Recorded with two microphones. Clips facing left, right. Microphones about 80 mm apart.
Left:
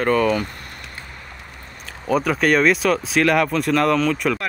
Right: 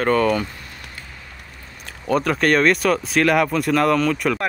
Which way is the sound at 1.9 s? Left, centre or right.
Centre.